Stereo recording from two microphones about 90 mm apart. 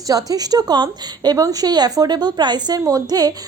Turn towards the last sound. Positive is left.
turn(degrees=-45)  # may be behind; listen again after turning